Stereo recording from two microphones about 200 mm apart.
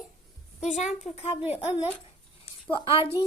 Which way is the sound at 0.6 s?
35° left (ahead or behind).